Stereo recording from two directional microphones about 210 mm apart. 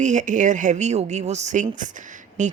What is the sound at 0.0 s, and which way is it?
Speech, 35° right (ahead or behind).